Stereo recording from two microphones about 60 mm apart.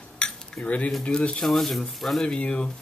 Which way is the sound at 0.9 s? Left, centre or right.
Centre.